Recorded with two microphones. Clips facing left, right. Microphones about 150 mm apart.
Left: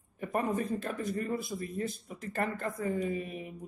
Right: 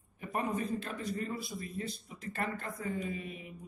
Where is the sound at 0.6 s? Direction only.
50° left (ahead or behind).